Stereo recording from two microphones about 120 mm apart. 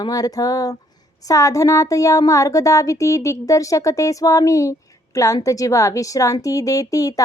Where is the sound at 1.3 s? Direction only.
25° left (ahead or behind).